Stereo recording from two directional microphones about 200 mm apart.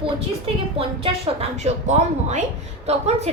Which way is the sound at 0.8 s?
30° right (ahead or behind).